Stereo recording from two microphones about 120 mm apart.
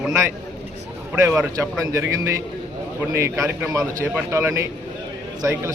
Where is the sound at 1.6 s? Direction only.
25° right (ahead or behind).